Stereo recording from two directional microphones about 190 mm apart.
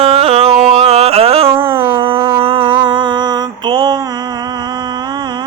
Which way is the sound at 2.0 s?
30° right (ahead or behind).